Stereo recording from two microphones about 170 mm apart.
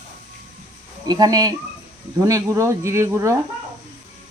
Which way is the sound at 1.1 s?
20° right (ahead or behind).